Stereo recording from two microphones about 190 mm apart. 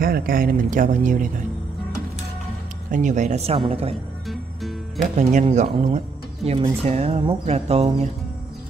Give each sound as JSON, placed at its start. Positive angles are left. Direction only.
{"t": 0.0, "sound": "speech", "side_deg": -50}
{"t": 2.9, "sound": "speech", "side_deg": -40}
{"t": 4.3, "sound": "music", "side_deg": 0}
{"t": 5.1, "sound": "speech", "side_deg": -40}
{"t": 5.9, "sound": "music", "side_deg": -30}
{"t": 6.8, "sound": "speech", "side_deg": -35}